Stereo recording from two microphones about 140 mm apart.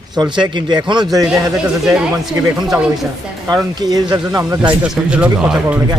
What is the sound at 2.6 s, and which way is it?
Speech, 5° right (ahead or behind).